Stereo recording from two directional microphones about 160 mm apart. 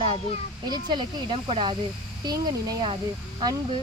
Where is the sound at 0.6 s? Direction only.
25° right (ahead or behind).